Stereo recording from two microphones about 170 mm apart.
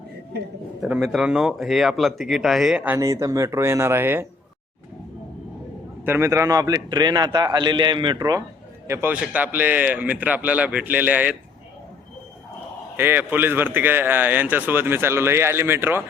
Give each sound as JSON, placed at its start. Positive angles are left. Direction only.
{"t": 0.8, "sound": "speech", "side_deg": -5}
{"t": 6.1, "sound": "a man's voice", "side_deg": -15}
{"t": 8.9, "sound": "a man's voice", "side_deg": -10}
{"t": 13.0, "sound": "a man's voice", "side_deg": -10}